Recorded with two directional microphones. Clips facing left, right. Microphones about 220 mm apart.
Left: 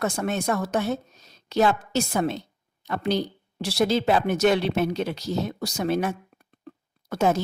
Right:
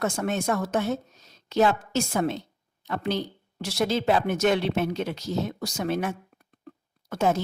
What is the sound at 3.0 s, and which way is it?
A woman's voice, 35° left (ahead or behind).